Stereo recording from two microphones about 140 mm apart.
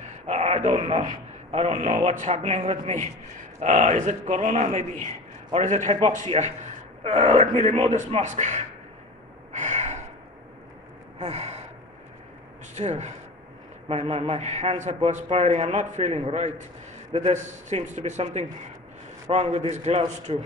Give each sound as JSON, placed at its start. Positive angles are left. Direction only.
{"t": 0.3, "sound": "a sound", "side_deg": -50}
{"t": 1.9, "sound": "a man's voice", "side_deg": -50}
{"t": 2.1, "sound": "a man's voice", "side_deg": -60}
{"t": 9.5, "sound": "gasp", "side_deg": -60}
{"t": 11.1, "sound": "gasp", "side_deg": -50}
{"t": 12.7, "sound": "a man's voice", "side_deg": -55}